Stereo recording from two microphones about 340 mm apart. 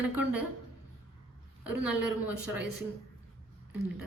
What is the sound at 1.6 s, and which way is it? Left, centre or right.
A woman's voice, centre.